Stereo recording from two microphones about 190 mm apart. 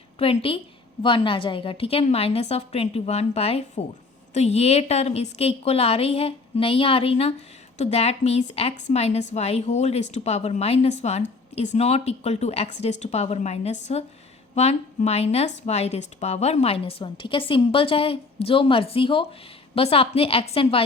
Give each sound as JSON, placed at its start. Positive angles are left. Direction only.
{"t": 0.2, "sound": "a woman's voice", "side_deg": 30}